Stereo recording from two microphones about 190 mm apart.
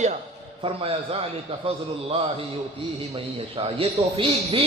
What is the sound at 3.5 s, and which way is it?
A man's voice, 30° right (ahead or behind).